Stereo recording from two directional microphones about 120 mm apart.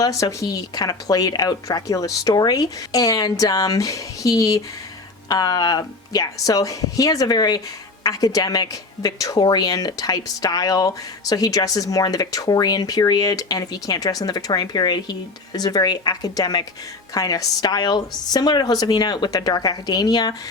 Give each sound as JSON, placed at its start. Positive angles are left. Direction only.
{"t": 0.0, "sound": "speech", "side_deg": 30}